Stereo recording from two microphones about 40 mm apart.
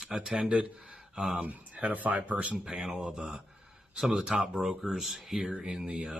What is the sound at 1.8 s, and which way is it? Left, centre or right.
Speech, right.